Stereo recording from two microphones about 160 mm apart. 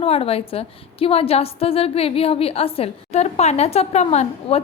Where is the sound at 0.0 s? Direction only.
40° left (ahead or behind).